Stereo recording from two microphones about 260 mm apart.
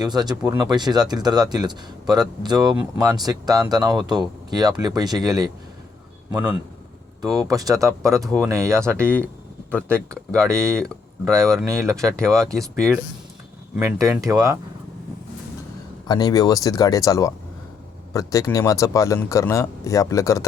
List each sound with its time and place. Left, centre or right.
0.0 s speech: centre
9.7 s speech: centre
16.0 s speech: centre